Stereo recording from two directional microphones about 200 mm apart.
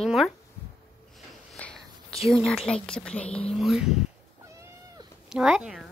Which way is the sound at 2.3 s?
Centre (ahead or behind).